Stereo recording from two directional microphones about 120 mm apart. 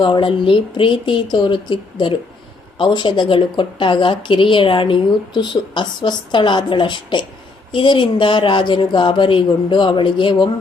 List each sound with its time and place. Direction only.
0.0 s speech: 45° left (ahead or behind)